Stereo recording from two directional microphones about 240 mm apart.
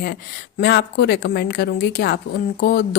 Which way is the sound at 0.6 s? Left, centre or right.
Left.